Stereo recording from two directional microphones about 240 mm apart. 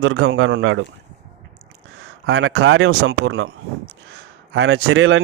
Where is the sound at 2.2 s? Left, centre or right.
Right.